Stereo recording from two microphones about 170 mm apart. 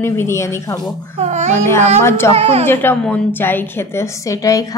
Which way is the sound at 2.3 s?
35° right (ahead or behind).